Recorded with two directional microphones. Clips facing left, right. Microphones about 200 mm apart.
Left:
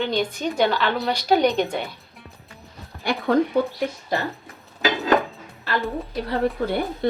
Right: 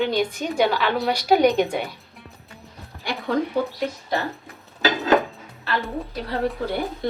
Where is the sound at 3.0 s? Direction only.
55° left (ahead or behind).